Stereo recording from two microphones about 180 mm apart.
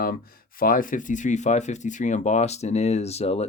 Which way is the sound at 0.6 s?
50° left (ahead or behind).